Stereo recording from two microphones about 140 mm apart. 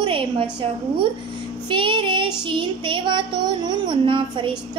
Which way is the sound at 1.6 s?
35° right (ahead or behind).